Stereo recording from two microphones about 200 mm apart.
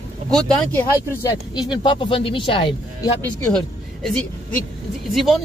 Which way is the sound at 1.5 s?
20° left (ahead or behind).